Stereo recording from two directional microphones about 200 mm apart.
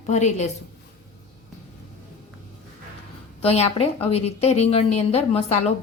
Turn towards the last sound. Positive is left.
turn(degrees=30)  # may be behind; listen again after turning